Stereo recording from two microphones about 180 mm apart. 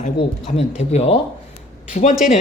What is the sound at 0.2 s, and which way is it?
Speech, 30° left (ahead or behind).